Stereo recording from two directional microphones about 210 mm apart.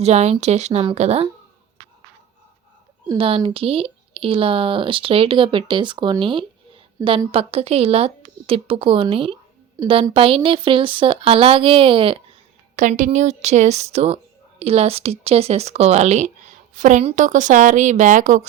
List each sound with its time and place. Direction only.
0.0 s speech: 30° right (ahead or behind)
3.1 s a woman's voice: 25° right (ahead or behind)
12.7 s a woman's voice: 35° right (ahead or behind)